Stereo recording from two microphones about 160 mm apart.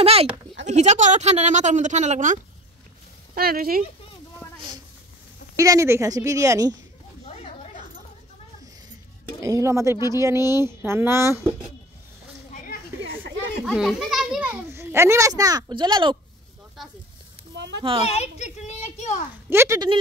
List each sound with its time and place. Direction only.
0.0 s speech: 40° right (ahead or behind)
3.3 s speech: 70° right (ahead or behind)
4.4 s a sound: 15° left (ahead or behind)
5.6 s a woman's voice: 20° right (ahead or behind)
9.4 s a woman's voice: 20° right (ahead or behind)
12.4 s a sound: 50° left (ahead or behind)
13.7 s a child's voice: centre (ahead or behind); by 16.2 s 30° right (ahead or behind)
17.7 s speech: 35° right (ahead or behind)
18.0 s a child's voice: 40° left (ahead or behind)
19.5 s speech: 15° right (ahead or behind)